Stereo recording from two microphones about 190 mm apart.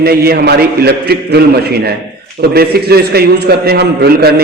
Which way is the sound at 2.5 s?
55° right (ahead or behind).